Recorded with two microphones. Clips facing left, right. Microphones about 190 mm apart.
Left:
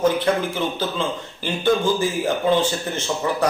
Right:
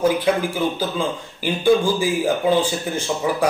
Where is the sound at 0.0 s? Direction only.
10° right (ahead or behind).